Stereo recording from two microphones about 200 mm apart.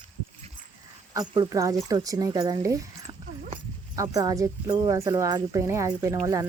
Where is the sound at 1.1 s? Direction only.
20° right (ahead or behind).